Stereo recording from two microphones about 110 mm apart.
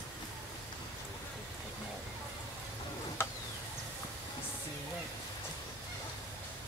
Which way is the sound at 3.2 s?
20° left (ahead or behind).